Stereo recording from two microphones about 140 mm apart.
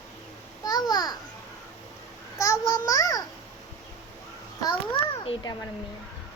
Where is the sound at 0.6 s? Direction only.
30° left (ahead or behind).